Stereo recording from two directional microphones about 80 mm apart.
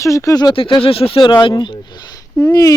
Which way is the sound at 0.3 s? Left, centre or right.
Left.